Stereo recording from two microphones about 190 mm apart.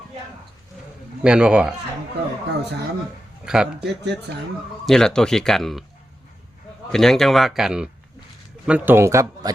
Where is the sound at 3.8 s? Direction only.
65° right (ahead or behind).